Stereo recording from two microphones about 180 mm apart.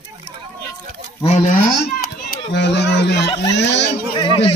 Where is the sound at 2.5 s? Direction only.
70° left (ahead or behind).